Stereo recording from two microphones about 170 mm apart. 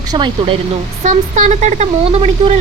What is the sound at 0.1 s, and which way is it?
Speech, 25° right (ahead or behind).